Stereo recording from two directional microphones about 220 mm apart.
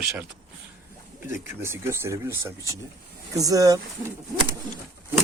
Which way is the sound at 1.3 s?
10° right (ahead or behind).